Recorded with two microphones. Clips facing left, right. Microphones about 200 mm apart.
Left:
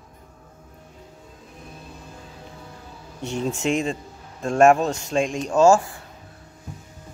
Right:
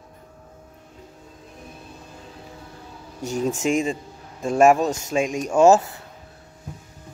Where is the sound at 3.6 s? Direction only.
Centre (ahead or behind).